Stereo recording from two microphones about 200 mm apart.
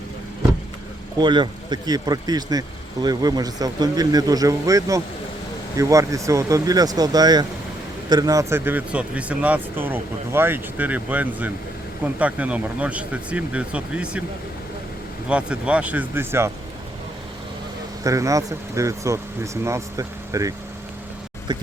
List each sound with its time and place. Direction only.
1.2 s speech: 25° right (ahead or behind); by 14.2 s 5° right (ahead or behind)
15.3 s speech: 5° right (ahead or behind)
18.0 s speech: 15° right (ahead or behind)